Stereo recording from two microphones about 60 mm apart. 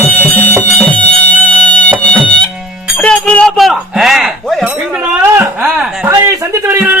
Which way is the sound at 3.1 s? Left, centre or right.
Centre.